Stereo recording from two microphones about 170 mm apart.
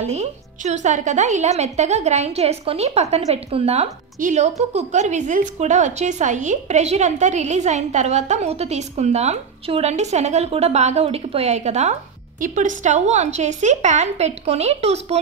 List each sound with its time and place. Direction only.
0.0 s a woman's voice: 40° right (ahead or behind)